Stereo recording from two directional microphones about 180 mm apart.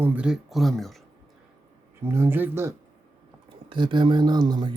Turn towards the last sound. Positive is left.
turn(degrees=-25)  # may be behind; listen again after turning